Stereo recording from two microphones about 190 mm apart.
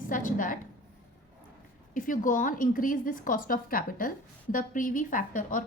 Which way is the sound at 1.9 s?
45° left (ahead or behind).